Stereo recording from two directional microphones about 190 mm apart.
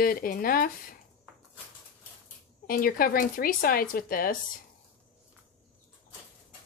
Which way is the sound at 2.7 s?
50° left (ahead or behind).